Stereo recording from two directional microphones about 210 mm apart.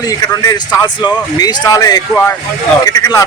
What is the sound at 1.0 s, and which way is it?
Speech, 20° left (ahead or behind).